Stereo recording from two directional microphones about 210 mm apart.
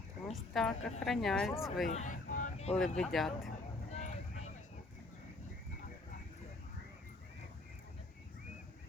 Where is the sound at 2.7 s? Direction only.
5° left (ahead or behind).